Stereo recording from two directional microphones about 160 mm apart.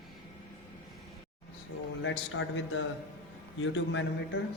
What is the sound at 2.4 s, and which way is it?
Speech, 90° left.